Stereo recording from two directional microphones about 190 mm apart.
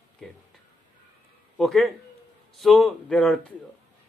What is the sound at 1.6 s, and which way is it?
A man's voice, centre (ahead or behind).